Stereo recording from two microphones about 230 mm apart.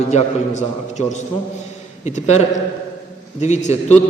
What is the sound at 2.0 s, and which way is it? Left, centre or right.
A man's voice, left.